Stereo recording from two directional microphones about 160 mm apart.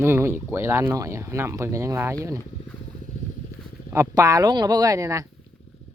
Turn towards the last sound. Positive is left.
turn(degrees=-20)  # may be behind; listen again after turning